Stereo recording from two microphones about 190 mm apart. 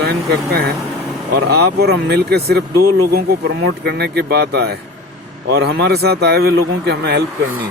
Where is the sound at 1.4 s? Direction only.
60° right (ahead or behind).